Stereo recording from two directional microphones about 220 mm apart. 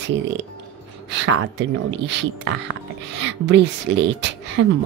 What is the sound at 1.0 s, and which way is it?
A woman's voice, 55° right (ahead or behind).